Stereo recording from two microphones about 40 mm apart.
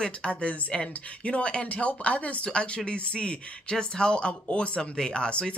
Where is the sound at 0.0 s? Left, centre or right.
Left.